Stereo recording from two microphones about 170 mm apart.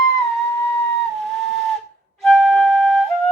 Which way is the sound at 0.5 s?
15° left (ahead or behind).